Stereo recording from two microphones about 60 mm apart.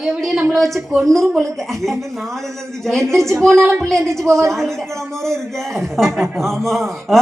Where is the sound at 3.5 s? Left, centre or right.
Right.